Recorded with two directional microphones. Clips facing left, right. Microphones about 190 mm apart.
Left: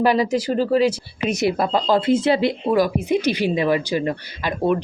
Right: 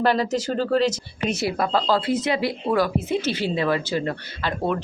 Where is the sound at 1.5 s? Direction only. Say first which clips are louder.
Left 3 dB; 30° left (ahead or behind).